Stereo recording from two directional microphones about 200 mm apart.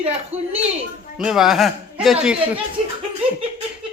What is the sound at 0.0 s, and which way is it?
Speech, 30° right (ahead or behind).